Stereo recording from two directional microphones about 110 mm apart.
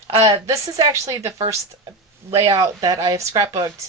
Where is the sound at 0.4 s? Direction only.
30° right (ahead or behind).